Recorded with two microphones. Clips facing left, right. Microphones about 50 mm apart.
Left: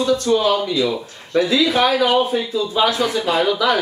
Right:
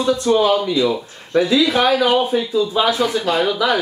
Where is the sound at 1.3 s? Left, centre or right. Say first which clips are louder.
Right 1 dB; centre.